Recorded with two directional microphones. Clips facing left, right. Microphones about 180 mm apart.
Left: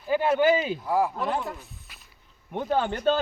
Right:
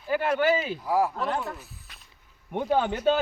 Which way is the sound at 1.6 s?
Centre (ahead or behind).